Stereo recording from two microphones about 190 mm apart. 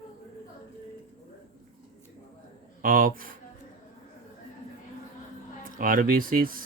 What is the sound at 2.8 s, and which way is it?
Speech, 45° right (ahead or behind).